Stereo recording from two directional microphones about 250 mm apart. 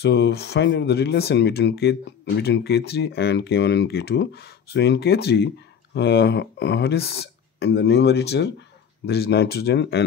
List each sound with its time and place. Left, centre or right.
0.0 s speech: left